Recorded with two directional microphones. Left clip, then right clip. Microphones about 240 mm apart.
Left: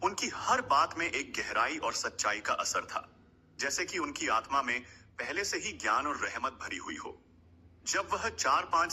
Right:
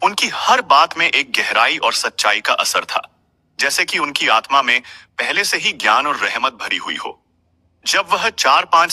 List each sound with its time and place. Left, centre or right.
0.0 s a man's voice: right
7.9 s a man's voice: right